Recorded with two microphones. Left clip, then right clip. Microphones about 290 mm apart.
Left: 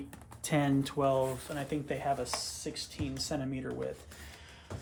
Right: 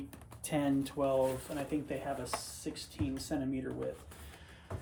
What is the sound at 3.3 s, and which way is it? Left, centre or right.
Speech, centre.